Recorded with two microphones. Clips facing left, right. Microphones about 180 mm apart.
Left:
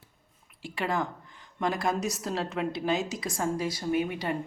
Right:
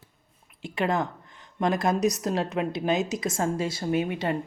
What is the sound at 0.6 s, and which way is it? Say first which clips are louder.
Speech: right 4 dB; 20° right (ahead or behind).